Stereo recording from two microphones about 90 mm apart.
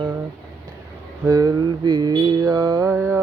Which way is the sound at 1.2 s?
45° right (ahead or behind).